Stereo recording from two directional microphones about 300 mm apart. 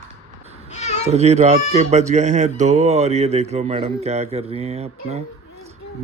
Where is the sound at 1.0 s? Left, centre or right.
Right.